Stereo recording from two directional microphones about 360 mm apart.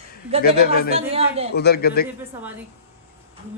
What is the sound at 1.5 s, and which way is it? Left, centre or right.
Speech, left.